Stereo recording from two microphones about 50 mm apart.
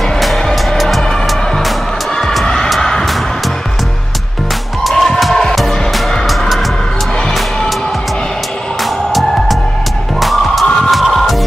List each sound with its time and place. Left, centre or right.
0.2 s music: centre
2.4 s music: centre
4.8 s music: centre
10.2 s music: centre